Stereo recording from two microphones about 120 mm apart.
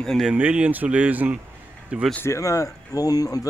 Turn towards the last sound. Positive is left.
turn(degrees=30)  # may be behind; listen again after turning